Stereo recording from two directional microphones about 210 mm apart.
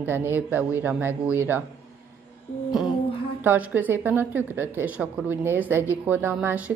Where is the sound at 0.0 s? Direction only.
10° right (ahead or behind).